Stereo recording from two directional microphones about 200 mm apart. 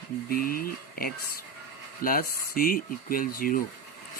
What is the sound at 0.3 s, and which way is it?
Speech, 45° left (ahead or behind).